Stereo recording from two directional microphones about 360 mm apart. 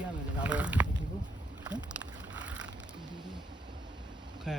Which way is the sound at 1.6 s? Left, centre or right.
Centre.